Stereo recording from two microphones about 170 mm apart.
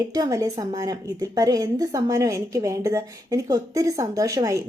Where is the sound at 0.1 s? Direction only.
20° right (ahead or behind).